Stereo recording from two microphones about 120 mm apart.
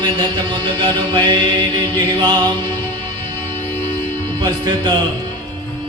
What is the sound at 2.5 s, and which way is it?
Music, 40° right (ahead or behind).